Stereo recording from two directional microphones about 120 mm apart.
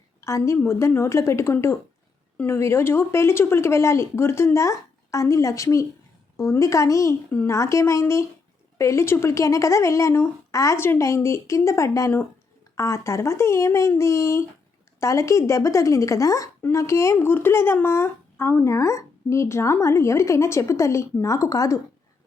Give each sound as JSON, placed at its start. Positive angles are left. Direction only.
{"t": 0.2, "sound": "speech", "side_deg": 25}
{"t": 7.3, "sound": "speech", "side_deg": 15}